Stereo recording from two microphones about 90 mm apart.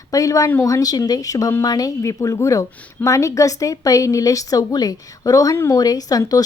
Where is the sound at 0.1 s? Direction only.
40° left (ahead or behind).